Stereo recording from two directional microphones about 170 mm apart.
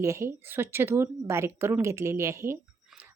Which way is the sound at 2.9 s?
10° right (ahead or behind).